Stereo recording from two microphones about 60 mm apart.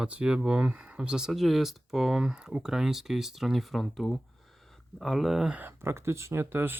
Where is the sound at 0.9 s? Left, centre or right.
Centre.